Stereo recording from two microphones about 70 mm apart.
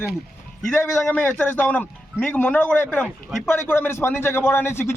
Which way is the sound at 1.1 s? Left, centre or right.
Left.